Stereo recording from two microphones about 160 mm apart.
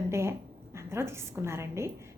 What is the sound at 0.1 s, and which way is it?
A woman's voice, 15° right (ahead or behind).